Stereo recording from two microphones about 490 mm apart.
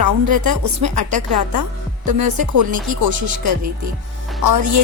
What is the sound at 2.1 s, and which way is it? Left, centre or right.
Music, right.